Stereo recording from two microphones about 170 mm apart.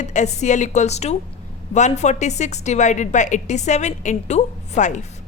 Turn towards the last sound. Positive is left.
turn(degrees=45)  # may be behind; listen again after turning